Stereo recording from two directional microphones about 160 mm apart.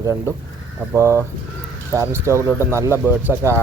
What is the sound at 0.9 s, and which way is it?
Speech, 15° right (ahead or behind).